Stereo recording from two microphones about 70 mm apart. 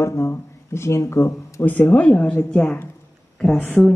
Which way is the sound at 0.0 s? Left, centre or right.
Left.